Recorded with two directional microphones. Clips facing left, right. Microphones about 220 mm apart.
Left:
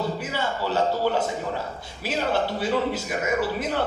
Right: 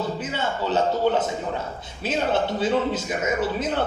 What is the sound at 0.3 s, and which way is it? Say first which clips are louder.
A man's voice: right 2 dB; 20° right (ahead or behind).